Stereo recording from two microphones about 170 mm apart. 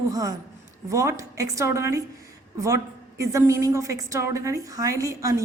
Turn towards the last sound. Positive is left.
turn(degrees=-20)  # may be behind; listen again after turning